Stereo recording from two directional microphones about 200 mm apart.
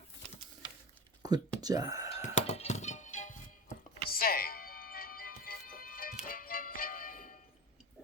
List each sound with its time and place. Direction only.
1.2 s speech: 20° right (ahead or behind)
2.1 s music: 30° left (ahead or behind)
4.1 s music: 50° left (ahead or behind)